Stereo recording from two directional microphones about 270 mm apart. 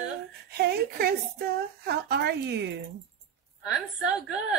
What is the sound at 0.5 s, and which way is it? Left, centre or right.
A woman's voice, right.